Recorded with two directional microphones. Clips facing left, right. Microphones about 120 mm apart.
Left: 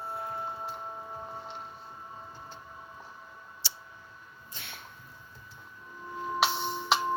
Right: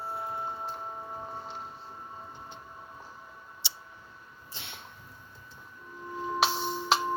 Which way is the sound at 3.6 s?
25° right (ahead or behind).